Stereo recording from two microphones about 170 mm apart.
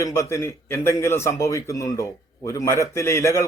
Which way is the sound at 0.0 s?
15° left (ahead or behind).